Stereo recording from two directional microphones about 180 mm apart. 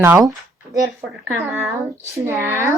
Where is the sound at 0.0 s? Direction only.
15° right (ahead or behind).